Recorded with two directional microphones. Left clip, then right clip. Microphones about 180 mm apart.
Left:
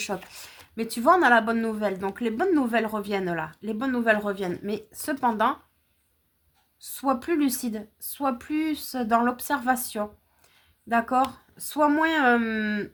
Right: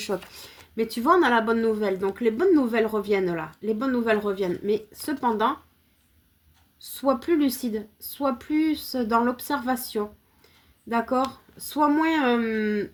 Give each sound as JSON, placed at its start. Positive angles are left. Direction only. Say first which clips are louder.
{"t": 0.3, "sound": "speech", "louder": "even", "side_deg": 25}
{"t": 6.7, "sound": "speech", "louder": "right 2 dB", "side_deg": 25}